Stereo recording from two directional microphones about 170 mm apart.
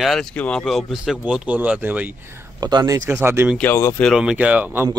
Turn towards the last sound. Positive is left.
turn(degrees=-10)  # may be behind; listen again after turning